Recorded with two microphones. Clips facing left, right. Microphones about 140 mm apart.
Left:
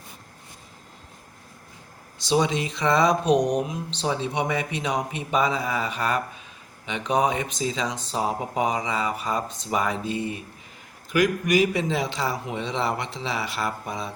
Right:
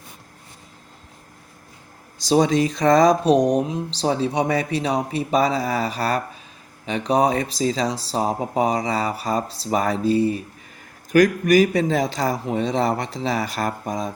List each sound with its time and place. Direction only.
2.1 s speech: 40° right (ahead or behind)